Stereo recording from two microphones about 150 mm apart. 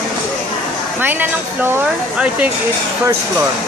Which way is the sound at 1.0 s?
15° right (ahead or behind).